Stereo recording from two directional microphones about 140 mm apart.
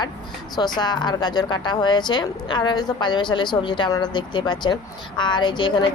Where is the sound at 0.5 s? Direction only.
30° left (ahead or behind).